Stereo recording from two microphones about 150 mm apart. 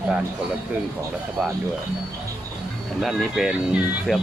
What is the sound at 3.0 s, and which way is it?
Speech, centre (ahead or behind).